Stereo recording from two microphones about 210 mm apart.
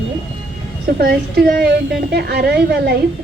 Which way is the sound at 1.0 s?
50° right (ahead or behind).